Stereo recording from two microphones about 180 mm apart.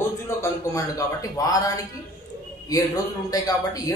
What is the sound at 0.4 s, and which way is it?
Speech, 20° left (ahead or behind).